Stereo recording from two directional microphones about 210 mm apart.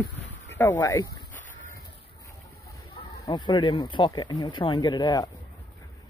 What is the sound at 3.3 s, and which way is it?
Speech, 20° left (ahead or behind).